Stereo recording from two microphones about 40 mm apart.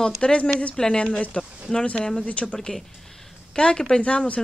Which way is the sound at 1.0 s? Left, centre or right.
Left.